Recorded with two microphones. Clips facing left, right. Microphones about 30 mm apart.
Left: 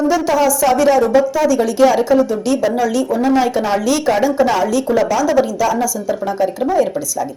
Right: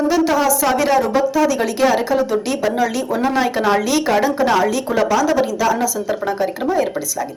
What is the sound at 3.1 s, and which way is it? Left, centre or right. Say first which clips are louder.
Speech: left 3 dB; right.